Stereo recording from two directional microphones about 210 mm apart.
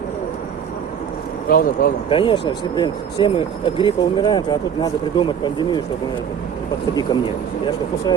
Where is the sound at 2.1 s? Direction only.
25° left (ahead or behind).